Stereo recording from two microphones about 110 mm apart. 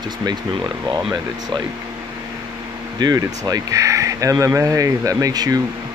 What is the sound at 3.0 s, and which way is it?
Speech, 35° right (ahead or behind).